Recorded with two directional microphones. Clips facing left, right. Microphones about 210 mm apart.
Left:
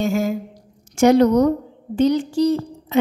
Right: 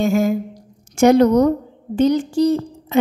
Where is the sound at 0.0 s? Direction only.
55° right (ahead or behind).